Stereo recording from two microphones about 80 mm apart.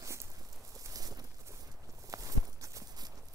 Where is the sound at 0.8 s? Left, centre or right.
Right.